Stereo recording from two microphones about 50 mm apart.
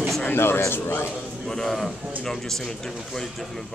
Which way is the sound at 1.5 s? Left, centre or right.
Centre.